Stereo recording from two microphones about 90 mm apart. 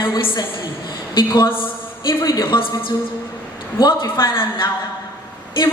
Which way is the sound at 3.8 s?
50° left (ahead or behind).